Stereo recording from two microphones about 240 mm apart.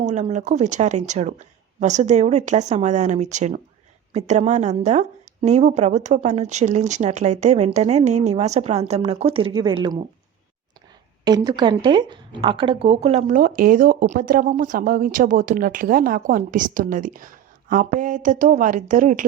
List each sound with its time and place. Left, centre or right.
0.0 s speech: right
11.3 s speech: centre; by 19.2 s right